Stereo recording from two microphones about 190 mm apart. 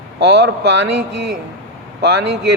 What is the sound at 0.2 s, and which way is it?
A man's voice, 65° right (ahead or behind).